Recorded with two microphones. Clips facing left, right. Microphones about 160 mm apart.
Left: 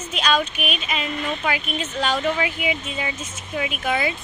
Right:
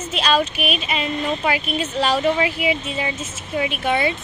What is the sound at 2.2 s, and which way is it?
Speech, 5° right (ahead or behind).